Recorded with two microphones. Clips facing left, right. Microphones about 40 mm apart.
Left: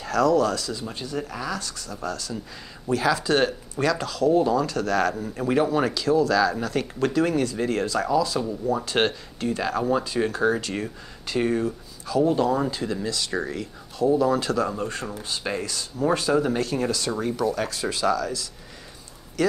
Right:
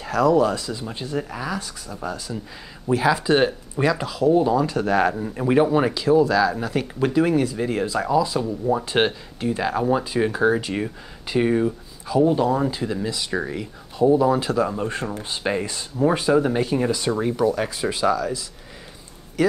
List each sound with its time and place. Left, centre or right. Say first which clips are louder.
0.0 s speech: right 2 dB; centre
14.8 s speech: right 3 dB; right